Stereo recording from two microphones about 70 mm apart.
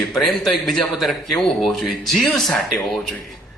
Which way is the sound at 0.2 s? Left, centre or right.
Centre.